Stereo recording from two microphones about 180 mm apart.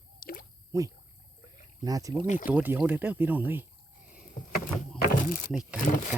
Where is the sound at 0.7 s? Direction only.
15° right (ahead or behind).